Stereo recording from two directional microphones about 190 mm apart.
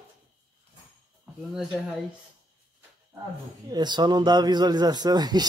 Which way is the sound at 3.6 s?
20° right (ahead or behind).